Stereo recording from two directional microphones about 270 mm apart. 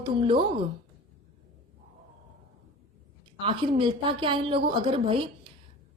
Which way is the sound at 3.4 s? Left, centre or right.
Centre.